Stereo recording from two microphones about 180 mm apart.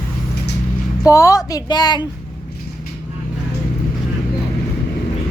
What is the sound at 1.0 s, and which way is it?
A woman's voice, 20° left (ahead or behind).